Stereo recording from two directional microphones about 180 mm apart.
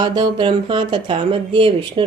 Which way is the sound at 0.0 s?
25° right (ahead or behind).